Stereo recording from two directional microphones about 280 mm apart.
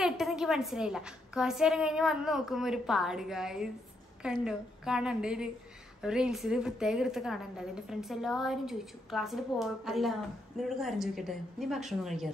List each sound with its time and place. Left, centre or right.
0.0 s a woman's voice: centre